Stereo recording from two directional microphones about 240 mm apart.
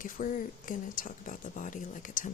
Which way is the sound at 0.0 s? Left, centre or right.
Left.